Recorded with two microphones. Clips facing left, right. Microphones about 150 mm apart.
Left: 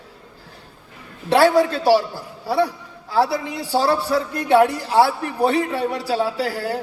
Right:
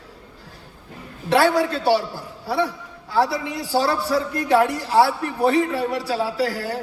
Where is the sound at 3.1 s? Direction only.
30° left (ahead or behind).